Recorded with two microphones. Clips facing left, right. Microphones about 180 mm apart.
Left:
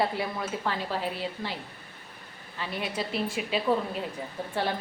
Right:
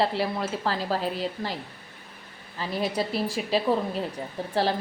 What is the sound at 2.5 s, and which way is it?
A woman's voice, 35° right (ahead or behind).